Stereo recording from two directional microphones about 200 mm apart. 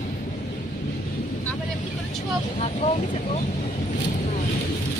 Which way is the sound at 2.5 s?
35° left (ahead or behind).